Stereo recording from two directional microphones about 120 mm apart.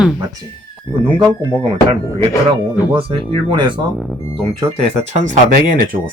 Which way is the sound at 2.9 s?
50° right (ahead or behind).